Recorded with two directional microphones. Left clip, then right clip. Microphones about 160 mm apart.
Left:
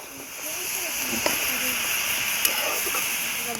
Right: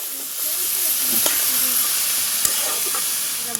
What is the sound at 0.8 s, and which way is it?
Hiss, 45° right (ahead or behind).